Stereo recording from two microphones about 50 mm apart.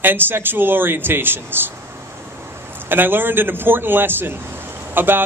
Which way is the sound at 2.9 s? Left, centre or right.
Right.